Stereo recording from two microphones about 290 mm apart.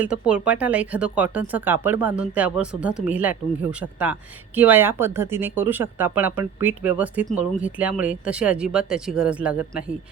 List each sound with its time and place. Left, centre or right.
0.0 s speech: centre